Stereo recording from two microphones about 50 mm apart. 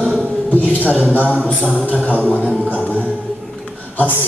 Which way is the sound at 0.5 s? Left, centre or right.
Left.